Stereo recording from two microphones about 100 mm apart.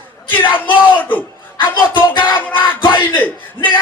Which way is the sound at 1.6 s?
55° left (ahead or behind).